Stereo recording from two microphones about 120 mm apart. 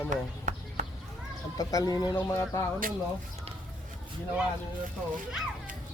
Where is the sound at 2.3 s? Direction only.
25° left (ahead or behind).